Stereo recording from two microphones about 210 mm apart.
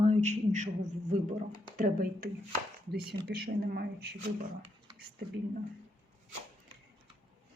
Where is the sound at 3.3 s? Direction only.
50° right (ahead or behind).